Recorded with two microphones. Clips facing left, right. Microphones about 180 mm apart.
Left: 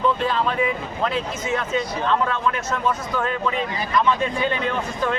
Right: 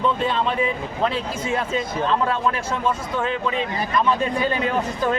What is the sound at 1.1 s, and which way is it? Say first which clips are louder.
Speech: even; 30° right (ahead or behind).